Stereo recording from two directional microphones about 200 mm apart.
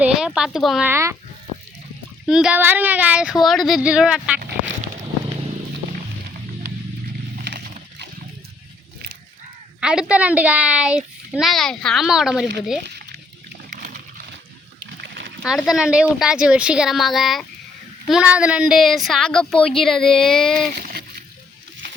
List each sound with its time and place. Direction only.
0.0 s a woman's voice: 5° right (ahead or behind)
0.9 s speech: 15° right (ahead or behind)
2.2 s a child's voice: 5° right (ahead or behind)
7.4 s a sound: 55° right (ahead or behind)
9.8 s a child's voice: 5° right (ahead or behind)
13.7 s a sound: 40° right (ahead or behind)
15.0 s splash: 55° right (ahead or behind)
15.4 s a child's voice: centre (ahead or behind)
20.7 s splash: 50° right (ahead or behind)